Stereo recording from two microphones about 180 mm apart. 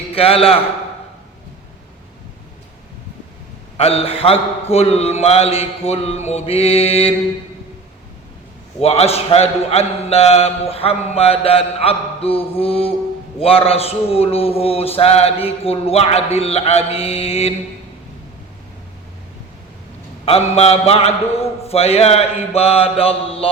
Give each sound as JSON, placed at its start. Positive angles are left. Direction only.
{"t": 0.1, "sound": "a man's voice", "side_deg": 35}
{"t": 3.8, "sound": "a man's voice", "side_deg": 35}
{"t": 8.8, "sound": "a man's voice", "side_deg": 35}
{"t": 20.2, "sound": "a man's voice", "side_deg": 35}